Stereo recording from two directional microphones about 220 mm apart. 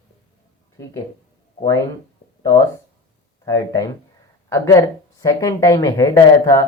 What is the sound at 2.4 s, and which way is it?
Speech, 15° left (ahead or behind).